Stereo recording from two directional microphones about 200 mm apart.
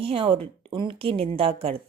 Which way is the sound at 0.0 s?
25° right (ahead or behind).